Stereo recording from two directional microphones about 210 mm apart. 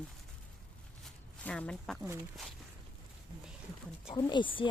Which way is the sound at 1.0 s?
5° left (ahead or behind).